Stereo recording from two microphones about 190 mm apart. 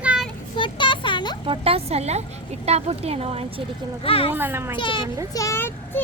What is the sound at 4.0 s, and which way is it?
Speech, 30° left (ahead or behind).